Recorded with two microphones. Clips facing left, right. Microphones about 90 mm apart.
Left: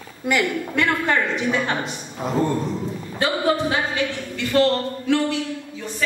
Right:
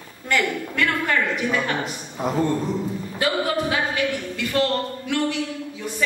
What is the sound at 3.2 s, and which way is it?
Speech, 30° left (ahead or behind).